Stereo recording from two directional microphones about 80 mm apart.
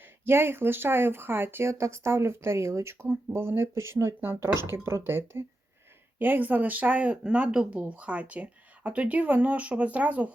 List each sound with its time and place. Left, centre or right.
0.3 s speech: right